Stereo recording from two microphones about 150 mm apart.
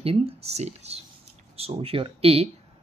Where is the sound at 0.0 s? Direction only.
40° right (ahead or behind).